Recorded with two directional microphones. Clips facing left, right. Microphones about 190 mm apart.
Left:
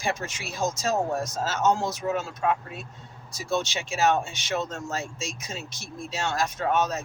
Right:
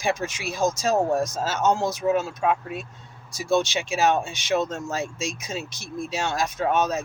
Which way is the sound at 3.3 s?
10° right (ahead or behind).